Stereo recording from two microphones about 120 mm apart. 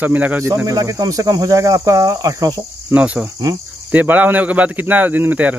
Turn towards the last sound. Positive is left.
turn(degrees=-15)  # may be behind; listen again after turning